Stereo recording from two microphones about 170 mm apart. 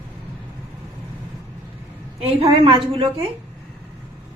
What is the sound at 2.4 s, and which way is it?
Speech, 35° right (ahead or behind).